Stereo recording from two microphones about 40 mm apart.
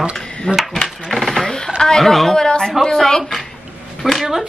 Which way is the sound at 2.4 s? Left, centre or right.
Centre.